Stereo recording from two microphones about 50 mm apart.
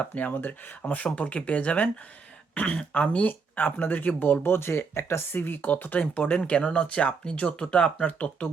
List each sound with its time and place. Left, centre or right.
0.0 s speech: left
5.7 s speech: left
6.4 s speech: centre